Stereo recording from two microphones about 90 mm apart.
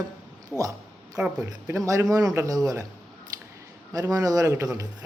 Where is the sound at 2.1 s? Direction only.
40° right (ahead or behind).